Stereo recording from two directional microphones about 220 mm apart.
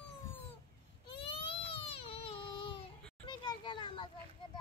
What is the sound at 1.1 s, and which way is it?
Baby cry, 25° left (ahead or behind).